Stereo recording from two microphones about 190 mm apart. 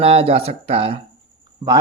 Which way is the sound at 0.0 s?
30° right (ahead or behind).